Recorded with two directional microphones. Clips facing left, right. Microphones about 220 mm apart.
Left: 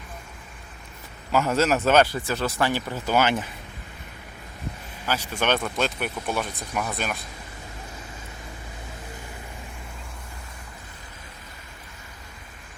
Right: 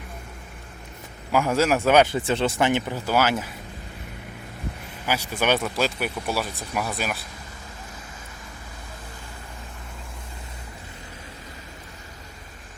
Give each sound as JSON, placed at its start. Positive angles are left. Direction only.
{"t": 1.3, "sound": "speech", "side_deg": -10}
{"t": 2.1, "sound": "speech", "side_deg": -25}
{"t": 5.0, "sound": "speech", "side_deg": -10}